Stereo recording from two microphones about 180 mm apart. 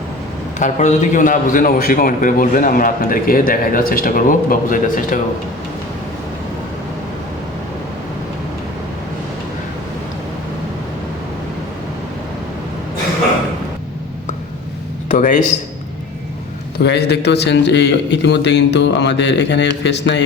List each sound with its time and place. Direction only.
0.6 s a man's voice: 40° left (ahead or behind)
15.1 s a man's voice: 45° left (ahead or behind)
16.8 s a man's voice: 70° left (ahead or behind)